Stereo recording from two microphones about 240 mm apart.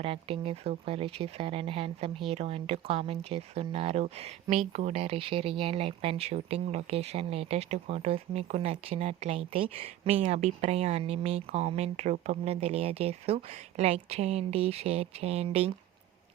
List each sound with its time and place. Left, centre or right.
0.0 s speech: right